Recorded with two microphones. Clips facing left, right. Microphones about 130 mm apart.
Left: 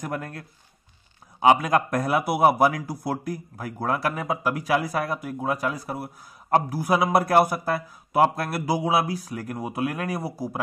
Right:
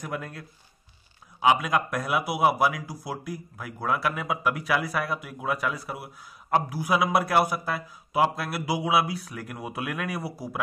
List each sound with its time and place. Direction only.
0.0 s a man's voice: 45° left (ahead or behind)